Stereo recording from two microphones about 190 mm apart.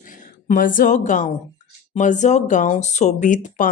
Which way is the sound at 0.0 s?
45° left (ahead or behind).